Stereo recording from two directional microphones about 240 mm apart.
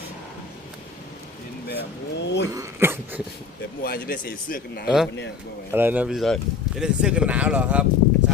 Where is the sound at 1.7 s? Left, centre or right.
Left.